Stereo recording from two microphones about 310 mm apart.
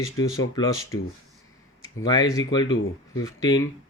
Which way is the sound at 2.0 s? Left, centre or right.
Centre.